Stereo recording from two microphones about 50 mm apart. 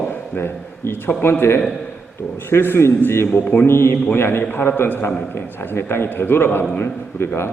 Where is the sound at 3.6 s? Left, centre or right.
Left.